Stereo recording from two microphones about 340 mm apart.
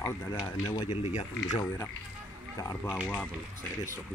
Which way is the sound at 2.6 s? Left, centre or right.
Centre.